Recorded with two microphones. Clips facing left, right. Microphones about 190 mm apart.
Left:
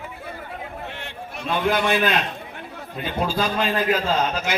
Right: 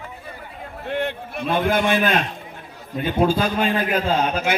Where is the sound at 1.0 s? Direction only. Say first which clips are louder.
Right 9 dB; 55° right (ahead or behind).